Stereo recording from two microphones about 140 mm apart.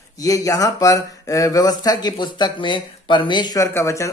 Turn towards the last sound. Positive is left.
turn(degrees=20)  # may be behind; listen again after turning